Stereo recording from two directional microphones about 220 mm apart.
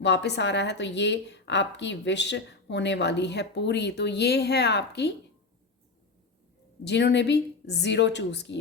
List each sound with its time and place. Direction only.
0.0 s a woman's voice: 50° left (ahead or behind)
6.8 s a woman's voice: 50° left (ahead or behind)